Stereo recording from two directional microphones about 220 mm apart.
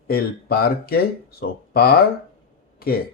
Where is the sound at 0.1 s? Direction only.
45° left (ahead or behind).